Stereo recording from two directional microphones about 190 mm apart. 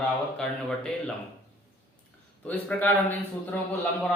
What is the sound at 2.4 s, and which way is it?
Speech, 10° left (ahead or behind).